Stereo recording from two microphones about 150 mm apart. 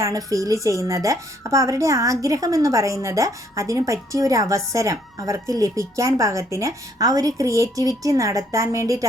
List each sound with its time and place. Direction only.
0.0 s a woman's voice: 25° right (ahead or behind)